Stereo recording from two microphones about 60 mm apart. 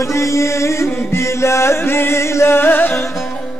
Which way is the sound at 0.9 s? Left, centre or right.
Left.